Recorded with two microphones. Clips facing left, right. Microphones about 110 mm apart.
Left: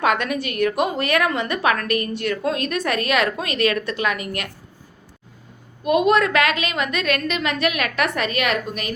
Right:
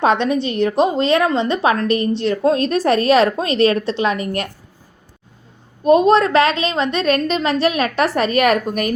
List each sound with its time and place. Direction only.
0.0 s a woman's voice: 25° right (ahead or behind)
5.8 s a woman's voice: 30° right (ahead or behind); by 8.9 s 45° right (ahead or behind)